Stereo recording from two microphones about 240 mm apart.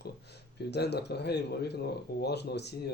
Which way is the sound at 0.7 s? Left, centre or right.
Left.